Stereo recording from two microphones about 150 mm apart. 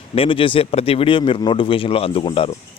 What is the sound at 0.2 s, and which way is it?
Speech, 35° left (ahead or behind).